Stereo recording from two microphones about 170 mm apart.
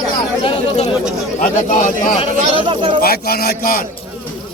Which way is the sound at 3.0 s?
65° left (ahead or behind).